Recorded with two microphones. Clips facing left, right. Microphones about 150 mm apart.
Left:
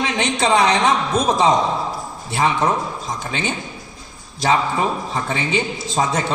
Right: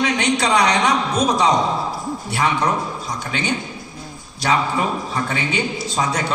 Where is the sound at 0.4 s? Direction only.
25° left (ahead or behind).